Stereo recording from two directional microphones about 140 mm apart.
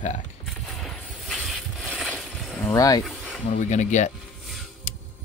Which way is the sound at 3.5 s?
60° left (ahead or behind).